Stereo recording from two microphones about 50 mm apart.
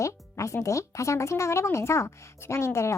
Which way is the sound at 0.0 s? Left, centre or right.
Left.